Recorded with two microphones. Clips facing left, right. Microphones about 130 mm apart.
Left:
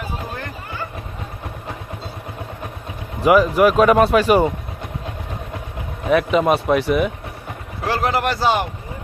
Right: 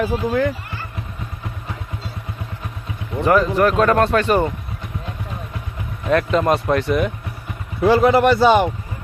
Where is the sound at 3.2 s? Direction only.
10° left (ahead or behind).